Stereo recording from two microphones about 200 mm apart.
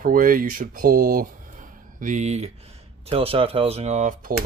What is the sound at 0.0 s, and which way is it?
Speech, 45° right (ahead or behind).